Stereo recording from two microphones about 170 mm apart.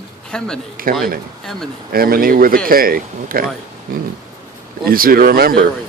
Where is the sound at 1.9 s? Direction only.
60° right (ahead or behind).